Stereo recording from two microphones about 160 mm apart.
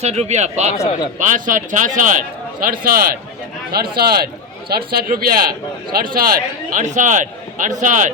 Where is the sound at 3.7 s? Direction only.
75° right (ahead or behind).